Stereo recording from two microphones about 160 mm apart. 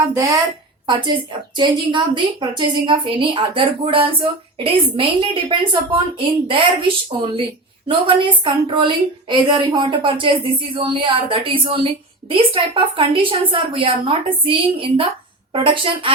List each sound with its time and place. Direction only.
0.0 s a woman's voice: 20° right (ahead or behind)